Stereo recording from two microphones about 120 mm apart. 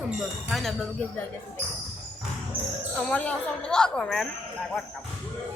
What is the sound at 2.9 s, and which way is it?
Speech, 10° left (ahead or behind).